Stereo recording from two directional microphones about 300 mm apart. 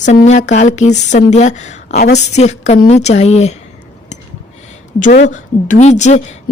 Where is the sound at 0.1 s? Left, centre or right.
Left.